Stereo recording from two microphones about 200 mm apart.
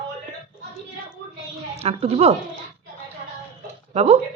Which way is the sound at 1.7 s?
30° right (ahead or behind).